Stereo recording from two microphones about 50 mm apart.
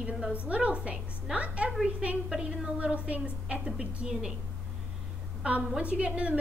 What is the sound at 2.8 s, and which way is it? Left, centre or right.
A woman's voice, right.